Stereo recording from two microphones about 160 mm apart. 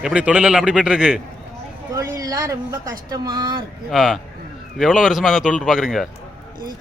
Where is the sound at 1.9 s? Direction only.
20° right (ahead or behind).